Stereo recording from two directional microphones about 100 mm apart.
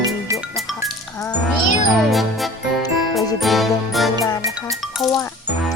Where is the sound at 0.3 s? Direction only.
35° right (ahead or behind).